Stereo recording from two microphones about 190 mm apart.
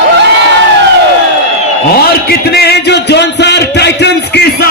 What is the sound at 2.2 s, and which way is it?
A man's voice, 55° left (ahead or behind).